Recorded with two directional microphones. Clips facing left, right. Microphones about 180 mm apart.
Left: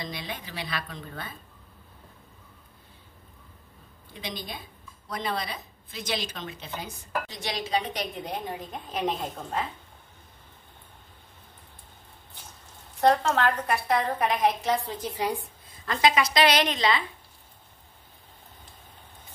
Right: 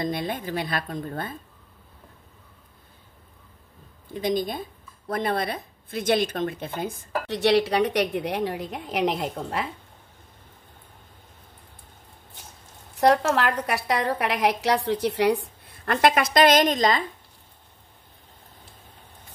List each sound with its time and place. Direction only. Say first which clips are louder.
0.0 s a woman's voice: right 9 dB; 50° right (ahead or behind)
4.1 s a woman's voice: right 12 dB; 45° right (ahead or behind); by 9.7 s 80° right
12.9 s a woman's voice: right 3 dB; 70° right (ahead or behind); by 17.0 s 45° right (ahead or behind)